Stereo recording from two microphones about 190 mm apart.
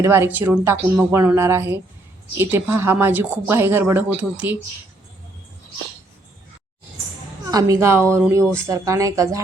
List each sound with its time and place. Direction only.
0.0 s speech: 10° right (ahead or behind)
7.4 s speech: 20° right (ahead or behind)